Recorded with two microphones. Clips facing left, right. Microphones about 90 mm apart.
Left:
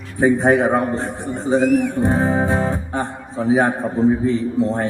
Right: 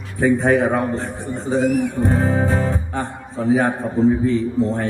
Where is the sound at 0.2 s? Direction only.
25° left (ahead or behind).